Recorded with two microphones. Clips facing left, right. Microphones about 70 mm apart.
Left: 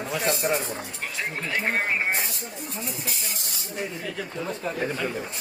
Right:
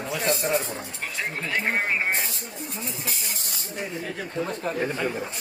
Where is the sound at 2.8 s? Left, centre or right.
Right.